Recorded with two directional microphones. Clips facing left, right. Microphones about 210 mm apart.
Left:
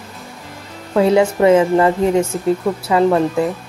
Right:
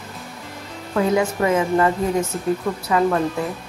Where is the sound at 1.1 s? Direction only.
30° left (ahead or behind).